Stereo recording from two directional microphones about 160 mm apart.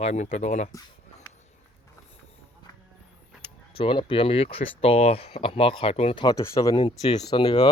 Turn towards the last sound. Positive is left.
turn(degrees=30)  # may be behind; listen again after turning